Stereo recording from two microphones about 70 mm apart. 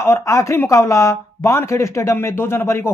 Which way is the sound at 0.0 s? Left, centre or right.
Left.